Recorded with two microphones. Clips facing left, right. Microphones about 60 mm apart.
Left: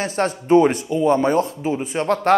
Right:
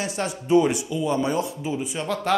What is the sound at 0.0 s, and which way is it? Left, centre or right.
Speech, left.